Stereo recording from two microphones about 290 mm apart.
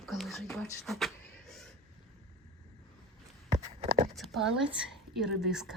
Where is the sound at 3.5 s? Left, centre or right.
Right.